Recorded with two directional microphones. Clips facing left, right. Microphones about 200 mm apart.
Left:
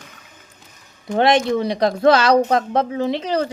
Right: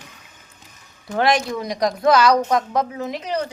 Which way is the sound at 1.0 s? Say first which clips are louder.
Left 3 dB; 25° left (ahead or behind).